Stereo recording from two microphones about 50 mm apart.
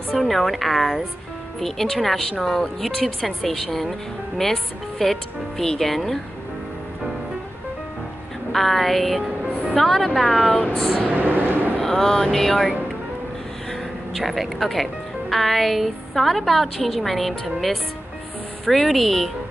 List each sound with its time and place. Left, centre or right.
0.1 s speech: centre
8.5 s speech: centre
11.1 s a sound: right
11.8 s music: centre
14.1 s speech: centre
18.7 s speech: centre